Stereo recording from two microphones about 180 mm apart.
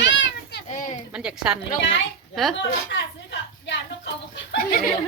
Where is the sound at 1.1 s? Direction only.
5° right (ahead or behind).